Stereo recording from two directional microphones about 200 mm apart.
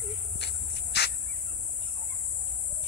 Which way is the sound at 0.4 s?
55° left (ahead or behind).